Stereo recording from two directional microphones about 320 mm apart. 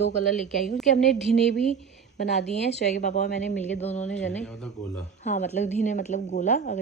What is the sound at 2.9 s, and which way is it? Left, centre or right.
Speech, left.